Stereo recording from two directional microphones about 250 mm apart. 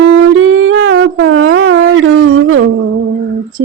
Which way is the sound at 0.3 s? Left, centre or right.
Right.